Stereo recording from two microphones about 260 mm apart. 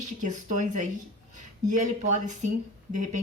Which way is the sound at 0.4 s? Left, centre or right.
Right.